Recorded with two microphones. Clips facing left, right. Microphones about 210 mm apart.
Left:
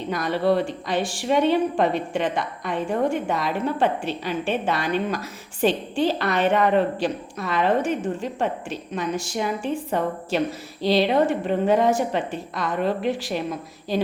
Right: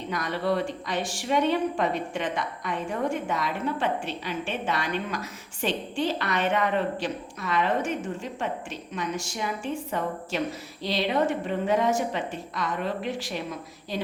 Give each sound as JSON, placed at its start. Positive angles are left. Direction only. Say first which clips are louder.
{"t": 0.1, "sound": "a woman's voice", "louder": "left 6 dB", "side_deg": 30}